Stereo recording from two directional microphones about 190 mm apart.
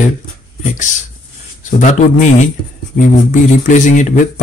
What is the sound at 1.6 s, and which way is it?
Speech, 40° left (ahead or behind).